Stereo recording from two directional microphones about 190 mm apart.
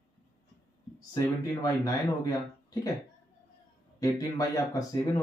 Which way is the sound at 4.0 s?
20° left (ahead or behind).